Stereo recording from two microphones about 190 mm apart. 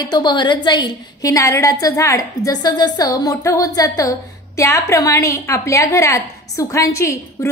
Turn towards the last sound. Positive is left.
turn(degrees=15)  # may be behind; listen again after turning